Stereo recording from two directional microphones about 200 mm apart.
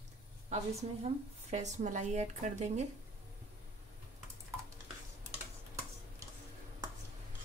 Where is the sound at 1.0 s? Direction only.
35° right (ahead or behind).